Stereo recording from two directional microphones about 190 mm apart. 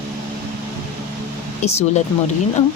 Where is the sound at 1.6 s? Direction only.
35° left (ahead or behind).